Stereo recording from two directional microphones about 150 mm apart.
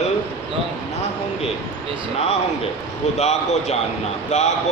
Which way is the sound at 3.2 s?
50° left (ahead or behind).